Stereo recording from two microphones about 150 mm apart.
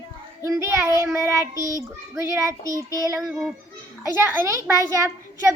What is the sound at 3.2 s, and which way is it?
Child singing, 10° right (ahead or behind).